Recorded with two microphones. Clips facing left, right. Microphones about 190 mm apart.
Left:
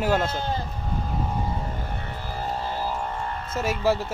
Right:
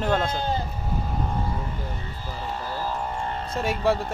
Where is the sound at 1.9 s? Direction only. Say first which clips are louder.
Left 2 dB; 60° left (ahead or behind).